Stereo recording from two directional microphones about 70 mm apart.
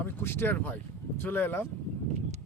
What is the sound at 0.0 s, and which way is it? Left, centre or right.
Speech, left.